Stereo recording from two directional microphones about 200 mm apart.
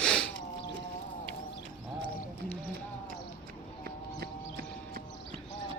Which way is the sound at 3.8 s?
50° right (ahead or behind).